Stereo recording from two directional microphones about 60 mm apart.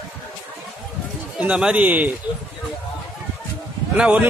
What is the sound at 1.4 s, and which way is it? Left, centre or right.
Speech, centre.